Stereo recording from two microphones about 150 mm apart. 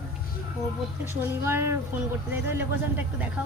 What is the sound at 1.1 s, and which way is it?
Speech, 15° right (ahead or behind).